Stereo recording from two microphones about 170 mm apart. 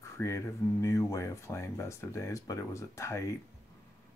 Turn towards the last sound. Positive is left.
turn(degrees=15)  # may be behind; listen again after turning